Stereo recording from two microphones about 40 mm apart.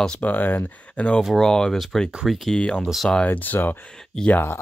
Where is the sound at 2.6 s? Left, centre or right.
Left.